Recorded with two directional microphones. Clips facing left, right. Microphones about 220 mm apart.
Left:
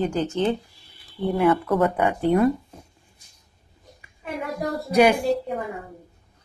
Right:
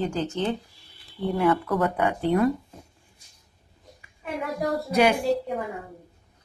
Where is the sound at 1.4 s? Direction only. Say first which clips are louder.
Left 3 dB; 20° left (ahead or behind).